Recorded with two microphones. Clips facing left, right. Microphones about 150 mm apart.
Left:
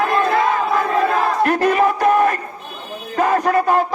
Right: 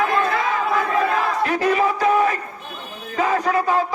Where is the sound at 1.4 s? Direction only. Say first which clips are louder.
Left 3 dB; 55° left (ahead or behind).